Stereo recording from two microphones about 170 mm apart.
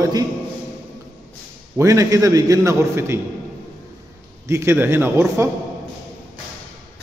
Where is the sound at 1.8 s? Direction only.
20° right (ahead or behind).